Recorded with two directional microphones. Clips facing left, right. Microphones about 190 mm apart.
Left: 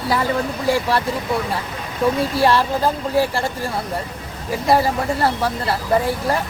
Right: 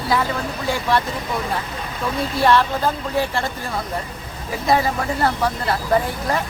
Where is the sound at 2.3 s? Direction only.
35° left (ahead or behind).